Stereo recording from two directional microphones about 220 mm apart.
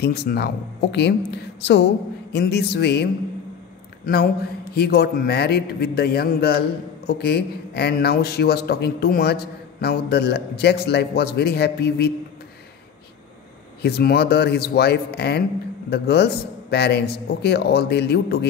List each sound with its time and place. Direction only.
0.0 s a man's voice: 45° left (ahead or behind)
13.8 s a man's voice: 45° left (ahead or behind)